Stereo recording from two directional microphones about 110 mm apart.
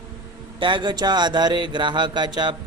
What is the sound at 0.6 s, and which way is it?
Speech, 45° right (ahead or behind).